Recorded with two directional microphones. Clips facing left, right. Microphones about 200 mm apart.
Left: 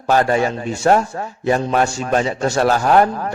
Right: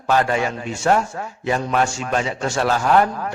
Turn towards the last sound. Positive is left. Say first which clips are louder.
# left 3 dB
turn(degrees=40)  # may be behind; listen again after turning